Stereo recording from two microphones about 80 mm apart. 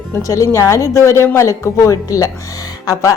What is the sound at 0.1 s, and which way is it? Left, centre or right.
A woman's voice, left.